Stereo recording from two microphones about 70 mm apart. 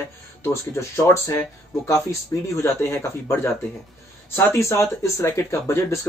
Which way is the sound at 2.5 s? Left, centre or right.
Left.